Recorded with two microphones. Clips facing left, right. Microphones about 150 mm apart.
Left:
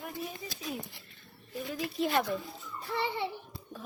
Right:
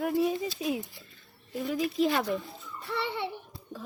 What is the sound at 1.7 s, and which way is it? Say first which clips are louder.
Speech: right 6 dB; 90° right.